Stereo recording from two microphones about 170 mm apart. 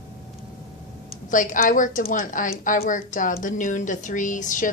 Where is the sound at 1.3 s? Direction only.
50° left (ahead or behind).